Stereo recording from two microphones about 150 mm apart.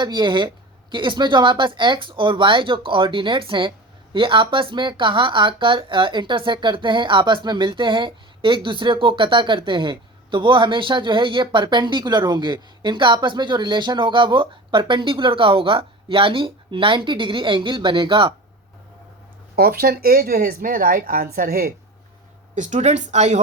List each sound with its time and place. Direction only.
0.0 s speech: 30° right (ahead or behind)
19.5 s speech: 90° right
22.5 s speech: 55° right (ahead or behind)